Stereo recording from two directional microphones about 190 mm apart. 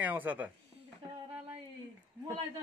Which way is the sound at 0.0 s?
10° right (ahead or behind).